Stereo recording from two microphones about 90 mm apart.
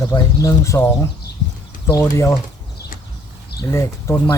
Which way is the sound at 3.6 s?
35° left (ahead or behind).